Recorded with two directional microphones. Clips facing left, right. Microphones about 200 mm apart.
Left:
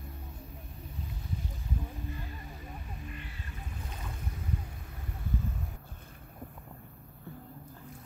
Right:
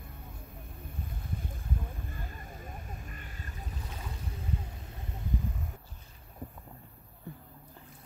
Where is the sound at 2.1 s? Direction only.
50° right (ahead or behind).